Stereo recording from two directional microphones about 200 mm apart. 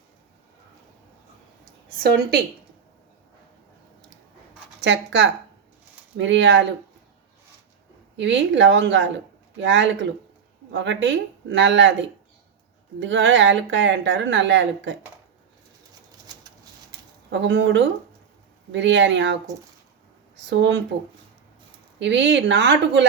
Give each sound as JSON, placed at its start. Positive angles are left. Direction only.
{"t": 4.8, "sound": "speech", "side_deg": -65}
{"t": 8.1, "sound": "speech", "side_deg": -65}
{"t": 17.3, "sound": "speech", "side_deg": -65}
{"t": 21.9, "sound": "speech", "side_deg": -65}